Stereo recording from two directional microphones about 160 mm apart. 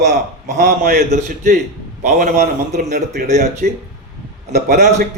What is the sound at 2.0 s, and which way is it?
Speech, 60° right (ahead or behind).